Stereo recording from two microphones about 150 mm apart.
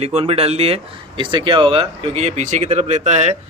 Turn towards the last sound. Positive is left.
turn(degrees=-50)  # may be behind; listen again after turning